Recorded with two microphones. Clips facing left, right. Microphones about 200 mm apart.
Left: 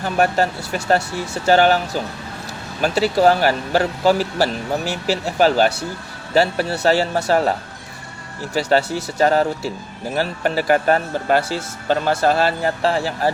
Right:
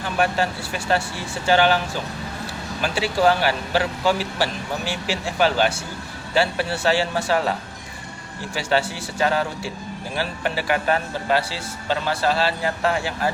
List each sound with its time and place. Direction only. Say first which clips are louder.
0.0 s speech: left 4 dB; 45° left (ahead or behind)
2.8 s speech: left 4 dB; 40° left (ahead or behind)
8.5 s speech: left 5 dB; 40° left (ahead or behind)
12.8 s speech: left 3 dB; 35° left (ahead or behind)